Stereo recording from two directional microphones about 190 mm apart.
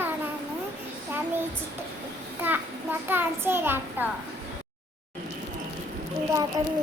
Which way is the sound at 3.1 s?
10° right (ahead or behind).